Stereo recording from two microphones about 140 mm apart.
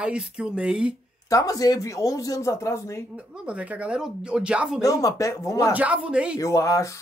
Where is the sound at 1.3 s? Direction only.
25° left (ahead or behind).